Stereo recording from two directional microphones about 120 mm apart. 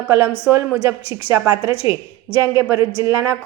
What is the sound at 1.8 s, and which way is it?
Speech, 45° left (ahead or behind).